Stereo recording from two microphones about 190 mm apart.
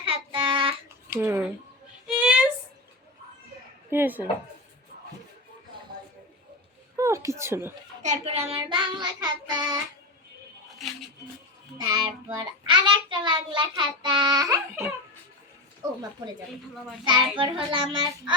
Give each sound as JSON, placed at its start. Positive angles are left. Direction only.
{"t": 0.0, "sound": "child singing", "side_deg": -25}
{"t": 1.1, "sound": "speech", "side_deg": -10}
{"t": 2.0, "sound": "a sound", "side_deg": -5}
{"t": 3.8, "sound": "speech", "side_deg": -10}
{"t": 6.9, "sound": "speech", "side_deg": -15}
{"t": 8.0, "sound": "child singing", "side_deg": -35}
{"t": 11.9, "sound": "child singing", "side_deg": -20}
{"t": 17.1, "sound": "child singing", "side_deg": -25}